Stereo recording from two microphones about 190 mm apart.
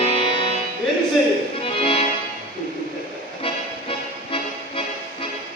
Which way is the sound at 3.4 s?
30° left (ahead or behind).